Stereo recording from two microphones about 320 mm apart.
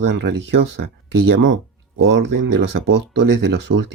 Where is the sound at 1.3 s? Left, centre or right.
Right.